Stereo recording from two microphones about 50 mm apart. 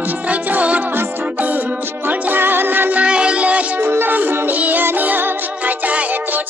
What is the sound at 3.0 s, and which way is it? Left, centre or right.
Music, right.